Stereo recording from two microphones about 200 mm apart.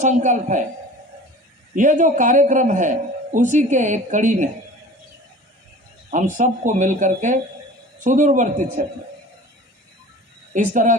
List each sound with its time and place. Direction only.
0.0 s a man's voice: 35° right (ahead or behind)
1.7 s a man's voice: 40° right (ahead or behind)
6.1 s a man's voice: 35° right (ahead or behind)
10.5 s a man's voice: 40° right (ahead or behind)